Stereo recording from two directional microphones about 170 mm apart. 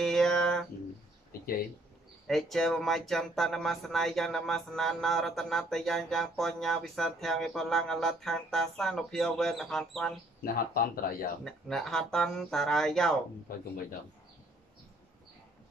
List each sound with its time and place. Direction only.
0.0 s a sound: centre (ahead or behind)
2.2 s speech: centre (ahead or behind)
10.4 s speech: 60° left (ahead or behind)
11.4 s speech: centre (ahead or behind)